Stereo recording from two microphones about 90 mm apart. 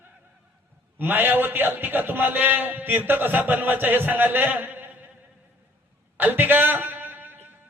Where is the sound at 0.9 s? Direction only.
20° right (ahead or behind).